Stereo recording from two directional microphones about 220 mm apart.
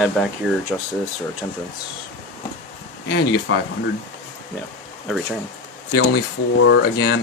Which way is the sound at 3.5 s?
60° left (ahead or behind).